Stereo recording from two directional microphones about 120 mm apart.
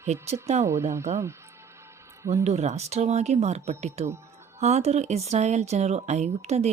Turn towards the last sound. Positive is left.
turn(degrees=-65)  # may be behind; listen again after turning